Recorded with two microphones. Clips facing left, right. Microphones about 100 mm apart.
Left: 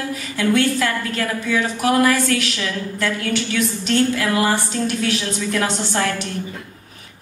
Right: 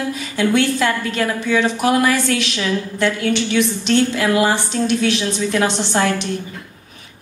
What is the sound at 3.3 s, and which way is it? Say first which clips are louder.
A woman's voice: right 3 dB; 25° right (ahead or behind).